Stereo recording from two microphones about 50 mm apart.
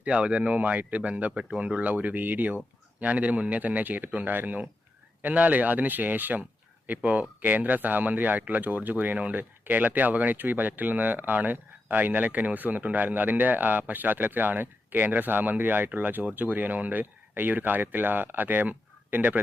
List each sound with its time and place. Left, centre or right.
0.0 s speech: right
1.4 s speech: right